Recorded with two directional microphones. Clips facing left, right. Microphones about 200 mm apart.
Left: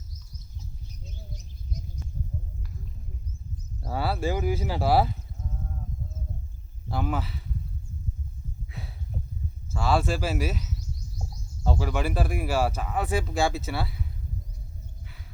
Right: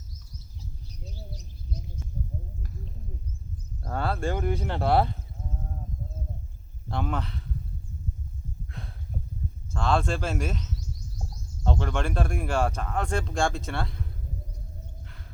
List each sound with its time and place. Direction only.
0.9 s bird: 35° right (ahead or behind)
3.8 s speech: 5° left (ahead or behind)
6.8 s speech: 5° left (ahead or behind)
8.7 s a sound: 5° left (ahead or behind)
9.7 s speech: 5° left (ahead or behind)
15.0 s a sound: 5° left (ahead or behind)